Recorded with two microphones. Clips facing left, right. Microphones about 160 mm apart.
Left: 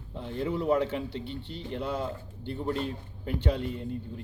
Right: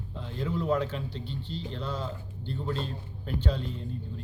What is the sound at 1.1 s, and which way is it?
Speech, 65° left (ahead or behind).